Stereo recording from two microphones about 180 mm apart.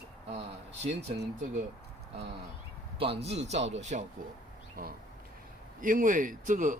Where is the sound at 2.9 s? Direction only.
35° right (ahead or behind).